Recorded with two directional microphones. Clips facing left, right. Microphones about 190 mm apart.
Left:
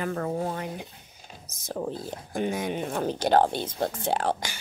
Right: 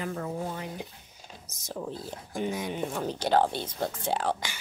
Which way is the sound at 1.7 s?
55° left (ahead or behind).